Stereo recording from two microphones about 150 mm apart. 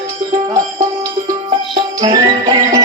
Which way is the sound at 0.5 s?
20° right (ahead or behind).